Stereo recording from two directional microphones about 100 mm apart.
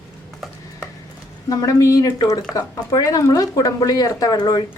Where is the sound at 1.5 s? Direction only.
35° left (ahead or behind).